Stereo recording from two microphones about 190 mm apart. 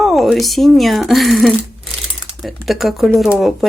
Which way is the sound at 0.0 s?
Centre (ahead or behind).